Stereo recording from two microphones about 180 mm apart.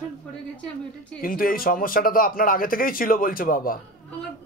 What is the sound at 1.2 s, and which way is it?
Speech, 55° left (ahead or behind).